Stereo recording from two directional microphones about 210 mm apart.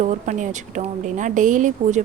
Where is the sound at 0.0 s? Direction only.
35° right (ahead or behind).